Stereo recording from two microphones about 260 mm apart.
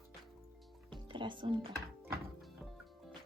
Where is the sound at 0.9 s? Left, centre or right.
Centre.